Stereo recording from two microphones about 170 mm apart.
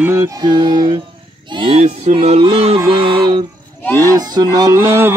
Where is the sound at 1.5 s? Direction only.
30° right (ahead or behind).